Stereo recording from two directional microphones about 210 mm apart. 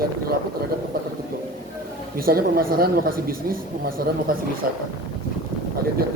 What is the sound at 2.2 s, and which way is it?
Speech, 45° right (ahead or behind).